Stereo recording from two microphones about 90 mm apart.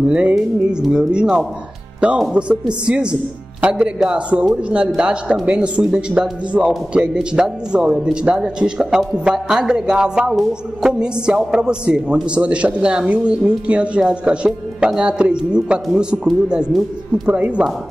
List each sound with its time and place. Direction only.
0.1 s a woman's voice: 10° right (ahead or behind)